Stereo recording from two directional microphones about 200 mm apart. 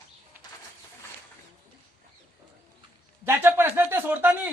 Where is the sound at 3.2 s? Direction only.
10° right (ahead or behind).